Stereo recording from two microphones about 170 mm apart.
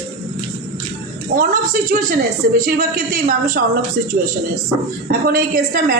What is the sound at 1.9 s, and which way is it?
A woman's voice, 55° right (ahead or behind).